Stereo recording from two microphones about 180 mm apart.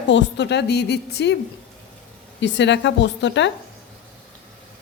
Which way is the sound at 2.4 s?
85° left.